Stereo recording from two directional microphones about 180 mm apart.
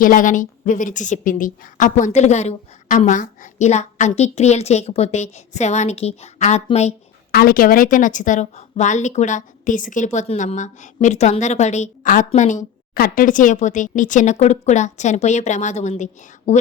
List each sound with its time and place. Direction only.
0.0 s a woman's voice: 50° left (ahead or behind)
7.3 s a woman's voice: 55° left (ahead or behind); by 16.6 s 40° left (ahead or behind)